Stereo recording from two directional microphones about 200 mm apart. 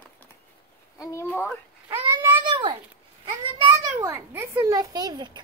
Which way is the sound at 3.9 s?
15° right (ahead or behind).